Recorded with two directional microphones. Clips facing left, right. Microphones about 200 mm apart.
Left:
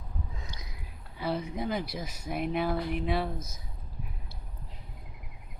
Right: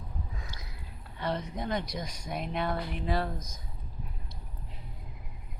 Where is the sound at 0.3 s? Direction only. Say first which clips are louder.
Even; 20° left (ahead or behind).